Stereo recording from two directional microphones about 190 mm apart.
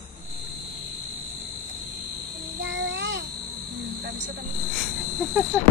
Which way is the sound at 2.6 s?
75° right (ahead or behind).